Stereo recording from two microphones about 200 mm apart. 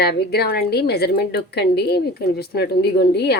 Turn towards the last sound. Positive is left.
turn(degrees=55)  # may be behind; listen again after turning